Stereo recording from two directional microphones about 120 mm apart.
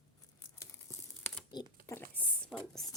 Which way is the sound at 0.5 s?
20° left (ahead or behind).